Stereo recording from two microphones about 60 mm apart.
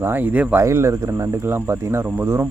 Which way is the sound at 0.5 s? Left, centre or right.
Right.